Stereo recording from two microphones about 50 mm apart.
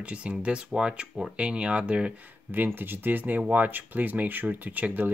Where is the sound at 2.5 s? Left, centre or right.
Right.